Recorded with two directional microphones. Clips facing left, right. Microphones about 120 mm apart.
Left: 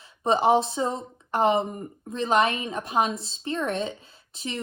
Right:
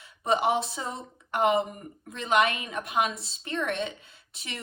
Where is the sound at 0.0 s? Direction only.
30° left (ahead or behind).